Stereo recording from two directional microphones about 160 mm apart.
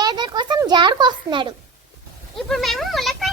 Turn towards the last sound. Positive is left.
turn(degrees=0)  # may be behind; listen again after turning